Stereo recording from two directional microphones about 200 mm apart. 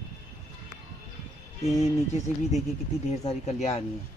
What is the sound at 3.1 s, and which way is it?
Speech, 35° left (ahead or behind).